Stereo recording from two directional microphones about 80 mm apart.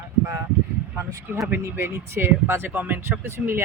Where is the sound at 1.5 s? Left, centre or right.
Right.